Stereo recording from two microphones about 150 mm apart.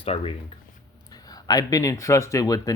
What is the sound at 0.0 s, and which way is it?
Speech, 40° left (ahead or behind).